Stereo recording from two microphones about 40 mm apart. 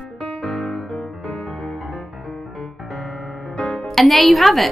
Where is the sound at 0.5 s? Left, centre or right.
Centre.